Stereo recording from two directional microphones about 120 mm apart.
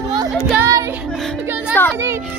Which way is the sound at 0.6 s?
25° right (ahead or behind).